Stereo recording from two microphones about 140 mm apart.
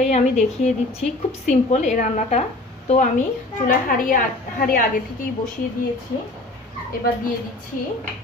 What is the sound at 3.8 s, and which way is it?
Speech, 85° left.